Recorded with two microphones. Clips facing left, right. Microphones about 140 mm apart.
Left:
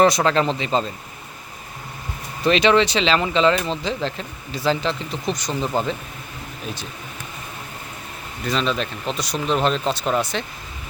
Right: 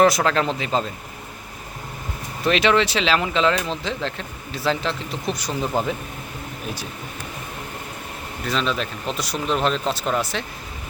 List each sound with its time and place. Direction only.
0.0 s speech: centre (ahead or behind)
2.4 s speech: centre (ahead or behind)
8.4 s speech: centre (ahead or behind)